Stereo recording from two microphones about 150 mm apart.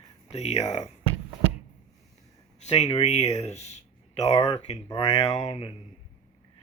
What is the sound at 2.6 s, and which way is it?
Speech, 45° left (ahead or behind).